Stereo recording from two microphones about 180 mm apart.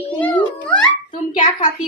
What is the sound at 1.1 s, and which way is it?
Speech, 45° left (ahead or behind).